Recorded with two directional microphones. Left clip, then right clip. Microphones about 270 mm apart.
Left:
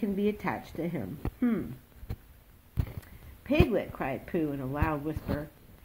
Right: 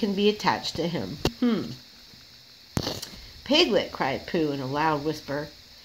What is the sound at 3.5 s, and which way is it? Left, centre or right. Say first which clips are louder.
A woman's voice: right 6 dB; right.